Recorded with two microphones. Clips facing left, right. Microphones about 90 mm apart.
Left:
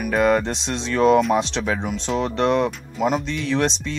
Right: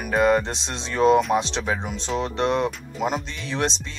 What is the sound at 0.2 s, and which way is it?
Speech, 15° right (ahead or behind).